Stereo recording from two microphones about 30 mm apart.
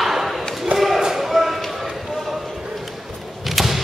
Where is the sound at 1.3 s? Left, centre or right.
Centre.